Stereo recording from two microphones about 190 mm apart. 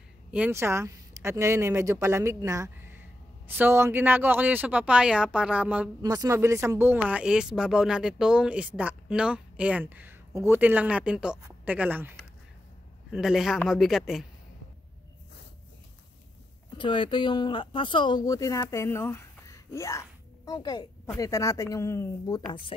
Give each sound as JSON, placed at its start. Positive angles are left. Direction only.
{"t": 0.3, "sound": "speech", "side_deg": -10}
{"t": 16.7, "sound": "speech", "side_deg": 25}